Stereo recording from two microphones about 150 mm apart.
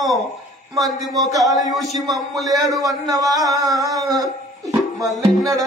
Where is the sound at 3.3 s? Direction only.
Centre (ahead or behind).